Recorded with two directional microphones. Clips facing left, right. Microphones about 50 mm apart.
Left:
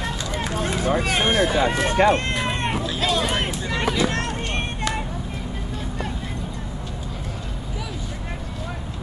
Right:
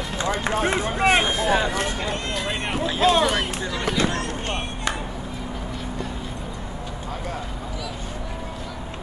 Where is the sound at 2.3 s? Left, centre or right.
Left.